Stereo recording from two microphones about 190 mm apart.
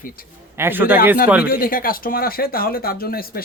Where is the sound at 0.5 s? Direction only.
10° right (ahead or behind).